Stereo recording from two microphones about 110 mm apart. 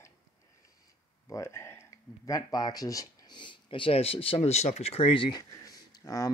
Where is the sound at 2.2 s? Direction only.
35° left (ahead or behind); by 5.3 s 55° left (ahead or behind).